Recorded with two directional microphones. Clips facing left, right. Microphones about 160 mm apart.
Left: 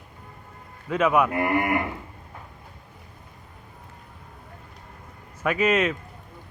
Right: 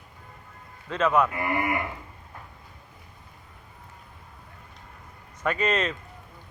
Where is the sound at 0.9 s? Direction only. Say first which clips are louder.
Left 2 dB; 10° left (ahead or behind).